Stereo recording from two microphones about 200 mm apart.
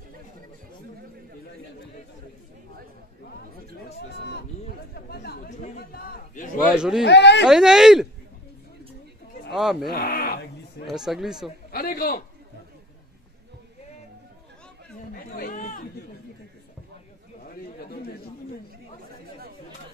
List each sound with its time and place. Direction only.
4.2 s a man's voice: 55° left (ahead or behind)
5.5 s a sound: 40° left (ahead or behind)
6.7 s speech: centre (ahead or behind)
7.1 s speech: 60° left (ahead or behind)
7.4 s speech: 5° right (ahead or behind)
9.5 s speech: centre (ahead or behind)
9.8 s speech: 50° left (ahead or behind)
10.9 s speech: centre (ahead or behind)
11.7 s a man's voice: 50° left (ahead or behind)
15.1 s chatter: 45° left (ahead or behind)
17.5 s chatter: 45° left (ahead or behind)